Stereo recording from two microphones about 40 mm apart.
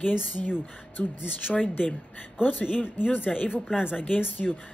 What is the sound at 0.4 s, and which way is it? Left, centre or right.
Speech, left.